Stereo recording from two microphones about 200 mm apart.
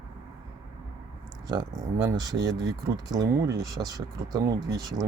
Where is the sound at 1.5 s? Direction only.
15° right (ahead or behind).